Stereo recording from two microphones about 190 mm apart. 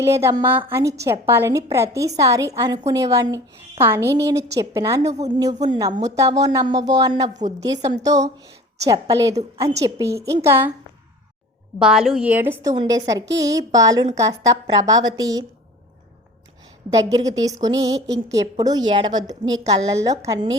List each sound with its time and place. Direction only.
0.0 s a woman's voice: 15° right (ahead or behind)
11.8 s a woman's voice: 5° right (ahead or behind)
12.6 s a woman's voice: 20° right (ahead or behind)
16.9 s a woman's voice: 20° right (ahead or behind)